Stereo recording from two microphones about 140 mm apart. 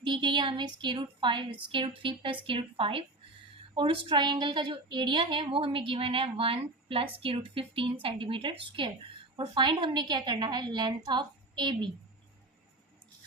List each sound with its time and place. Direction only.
0.0 s a woman's voice: 35° right (ahead or behind)